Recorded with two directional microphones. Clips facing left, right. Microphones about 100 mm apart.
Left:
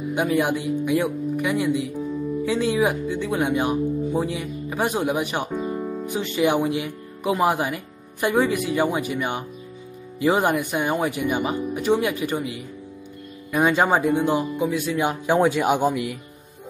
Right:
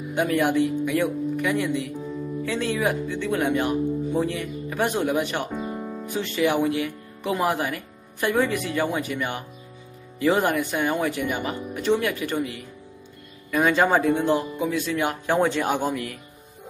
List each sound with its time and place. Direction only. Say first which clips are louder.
0.1 s speech: even; 15° left (ahead or behind)
5.6 s music: left 4 dB; centre (ahead or behind)
6.0 s speech: left 1 dB; 15° left (ahead or behind)